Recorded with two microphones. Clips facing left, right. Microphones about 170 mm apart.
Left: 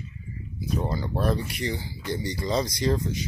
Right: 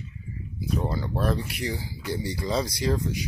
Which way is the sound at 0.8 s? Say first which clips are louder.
Left 1 dB; centre (ahead or behind).